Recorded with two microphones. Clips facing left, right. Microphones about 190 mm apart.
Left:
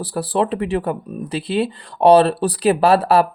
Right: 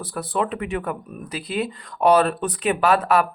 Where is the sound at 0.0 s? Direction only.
30° left (ahead or behind).